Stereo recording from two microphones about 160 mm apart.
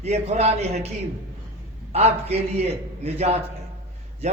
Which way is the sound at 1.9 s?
40° right (ahead or behind).